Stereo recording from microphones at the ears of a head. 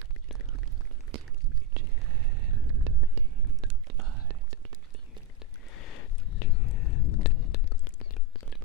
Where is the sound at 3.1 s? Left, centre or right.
Right.